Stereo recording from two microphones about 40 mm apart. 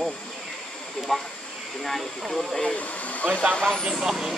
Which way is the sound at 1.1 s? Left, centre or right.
Centre.